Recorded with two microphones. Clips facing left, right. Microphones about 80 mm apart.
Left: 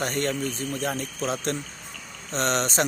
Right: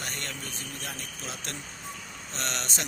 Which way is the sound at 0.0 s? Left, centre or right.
Left.